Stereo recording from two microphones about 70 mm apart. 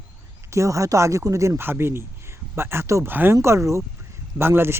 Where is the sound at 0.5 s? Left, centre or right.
Right.